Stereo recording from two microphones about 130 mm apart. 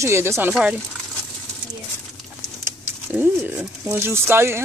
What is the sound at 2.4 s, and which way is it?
Speech, 15° right (ahead or behind).